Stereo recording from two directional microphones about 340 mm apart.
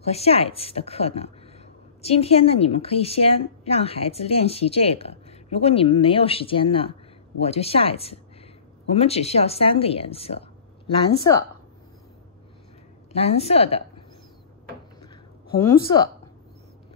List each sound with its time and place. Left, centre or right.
0.0 s a woman's voice: centre
13.1 s a woman's voice: centre